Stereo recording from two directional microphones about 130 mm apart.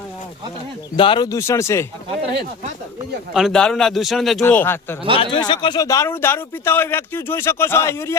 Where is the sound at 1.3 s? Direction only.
20° left (ahead or behind).